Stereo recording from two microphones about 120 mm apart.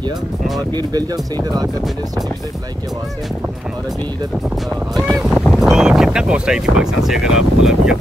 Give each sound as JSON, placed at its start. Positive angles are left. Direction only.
{"t": 0.7, "sound": "speech", "side_deg": -35}
{"t": 4.9, "sound": "speech", "side_deg": 0}